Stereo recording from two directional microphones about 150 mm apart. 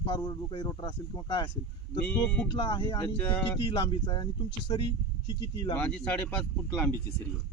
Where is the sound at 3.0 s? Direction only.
10° left (ahead or behind).